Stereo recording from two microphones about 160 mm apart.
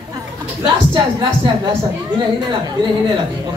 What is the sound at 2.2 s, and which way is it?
Speech, 25° right (ahead or behind).